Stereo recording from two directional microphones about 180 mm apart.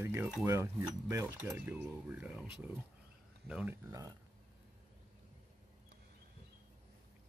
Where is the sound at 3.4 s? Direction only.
10° right (ahead or behind).